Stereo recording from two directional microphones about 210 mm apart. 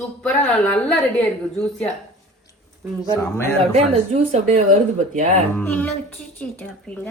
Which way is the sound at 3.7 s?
30° right (ahead or behind).